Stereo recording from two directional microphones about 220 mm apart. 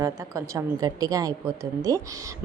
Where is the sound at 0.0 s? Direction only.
15° right (ahead or behind).